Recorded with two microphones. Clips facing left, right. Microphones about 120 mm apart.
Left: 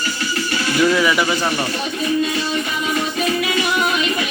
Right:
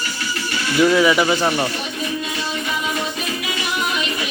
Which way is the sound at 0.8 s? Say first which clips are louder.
Right 2 dB; 25° right (ahead or behind).